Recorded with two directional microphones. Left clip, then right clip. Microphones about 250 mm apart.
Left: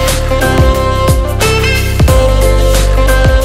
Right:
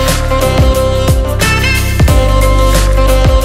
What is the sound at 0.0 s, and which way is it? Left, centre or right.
Music, centre.